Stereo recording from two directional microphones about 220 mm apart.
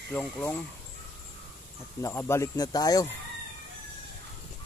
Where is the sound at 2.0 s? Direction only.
10° left (ahead or behind).